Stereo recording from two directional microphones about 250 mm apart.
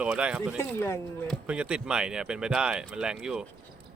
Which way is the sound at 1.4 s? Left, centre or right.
Centre.